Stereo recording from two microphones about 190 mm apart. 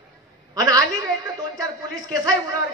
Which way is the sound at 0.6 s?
20° right (ahead or behind).